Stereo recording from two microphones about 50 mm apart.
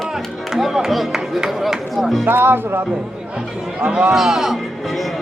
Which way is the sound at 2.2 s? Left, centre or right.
Right.